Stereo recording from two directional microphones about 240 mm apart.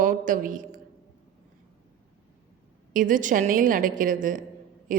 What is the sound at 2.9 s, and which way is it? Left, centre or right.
A woman's voice, right.